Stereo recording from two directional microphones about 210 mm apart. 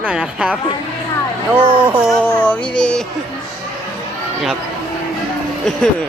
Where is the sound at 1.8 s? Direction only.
5° left (ahead or behind).